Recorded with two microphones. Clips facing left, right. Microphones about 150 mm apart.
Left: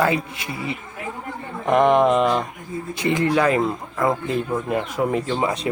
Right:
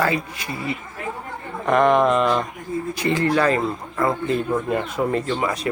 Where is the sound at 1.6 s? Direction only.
15° left (ahead or behind).